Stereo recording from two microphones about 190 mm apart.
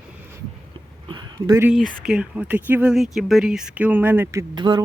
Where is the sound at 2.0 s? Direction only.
5° right (ahead or behind).